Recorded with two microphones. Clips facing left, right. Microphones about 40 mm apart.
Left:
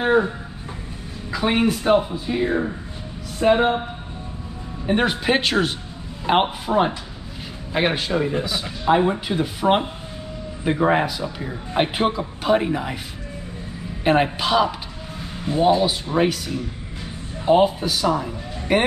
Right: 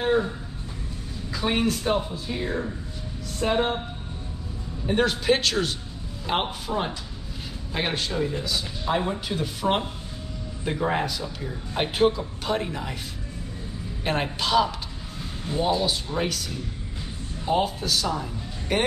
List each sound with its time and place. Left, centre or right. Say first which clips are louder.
0.0 s a sound: left 5 dB; left
1.3 s speech: left 5 dB; left
4.8 s speech: left 2 dB; left
14.0 s a man's voice: left 8 dB; centre